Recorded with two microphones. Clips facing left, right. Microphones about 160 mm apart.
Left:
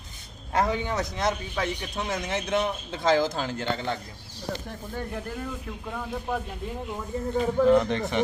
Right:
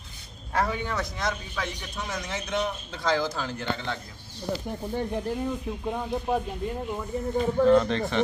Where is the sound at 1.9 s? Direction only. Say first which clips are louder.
Left 4 dB; 55° left (ahead or behind).